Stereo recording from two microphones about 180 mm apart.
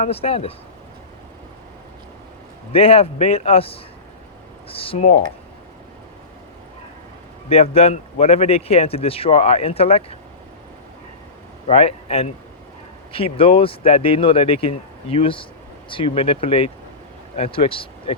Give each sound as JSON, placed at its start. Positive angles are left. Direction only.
{"t": 0.0, "sound": "a man's voice", "side_deg": 35}
{"t": 2.7, "sound": "a man's voice", "side_deg": 35}
{"t": 7.5, "sound": "a man's voice", "side_deg": 35}
{"t": 11.7, "sound": "a man's voice", "side_deg": 35}